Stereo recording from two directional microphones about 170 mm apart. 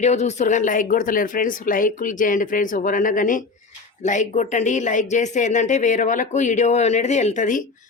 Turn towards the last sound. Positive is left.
turn(degrees=50)  # may be behind; listen again after turning